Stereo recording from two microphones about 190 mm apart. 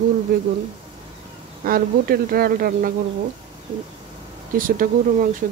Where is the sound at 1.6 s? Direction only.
50° right (ahead or behind).